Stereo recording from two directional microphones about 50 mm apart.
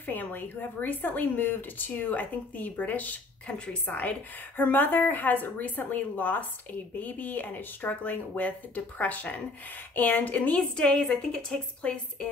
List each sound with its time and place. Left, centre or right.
0.0 s speech: left
3.4 s a woman's voice: left